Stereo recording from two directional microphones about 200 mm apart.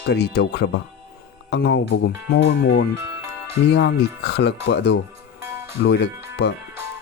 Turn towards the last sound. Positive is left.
turn(degrees=60)  # may be behind; listen again after turning